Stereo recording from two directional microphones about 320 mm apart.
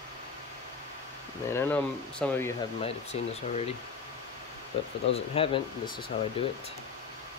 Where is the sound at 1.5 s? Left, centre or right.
Centre.